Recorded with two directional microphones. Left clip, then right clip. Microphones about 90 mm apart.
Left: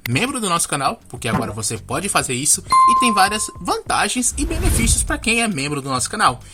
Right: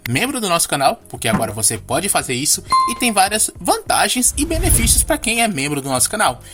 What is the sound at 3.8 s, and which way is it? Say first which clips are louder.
Speech: right 3 dB; 25° right (ahead or behind).